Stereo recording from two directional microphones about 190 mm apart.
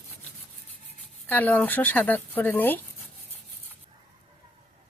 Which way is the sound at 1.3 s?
10° left (ahead or behind).